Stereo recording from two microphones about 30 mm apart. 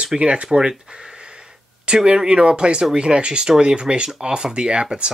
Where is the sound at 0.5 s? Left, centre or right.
Right.